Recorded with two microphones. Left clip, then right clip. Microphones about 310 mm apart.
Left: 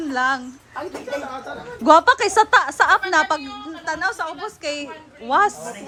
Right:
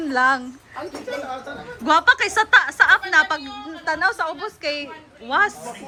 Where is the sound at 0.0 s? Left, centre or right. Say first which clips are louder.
Right 2 dB; centre.